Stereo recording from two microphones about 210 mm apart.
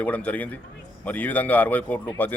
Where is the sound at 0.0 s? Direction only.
5° left (ahead or behind).